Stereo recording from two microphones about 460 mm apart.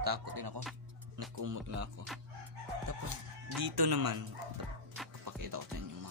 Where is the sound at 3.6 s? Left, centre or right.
Right.